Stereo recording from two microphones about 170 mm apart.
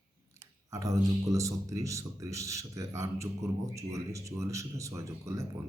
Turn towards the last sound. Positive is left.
turn(degrees=-20)  # may be behind; listen again after turning